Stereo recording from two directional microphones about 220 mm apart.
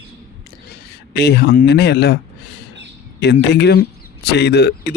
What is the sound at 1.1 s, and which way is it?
Speech, 50° left (ahead or behind).